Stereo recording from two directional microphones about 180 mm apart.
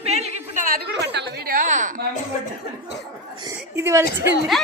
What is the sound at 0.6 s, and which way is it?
Speech, 50° right (ahead or behind).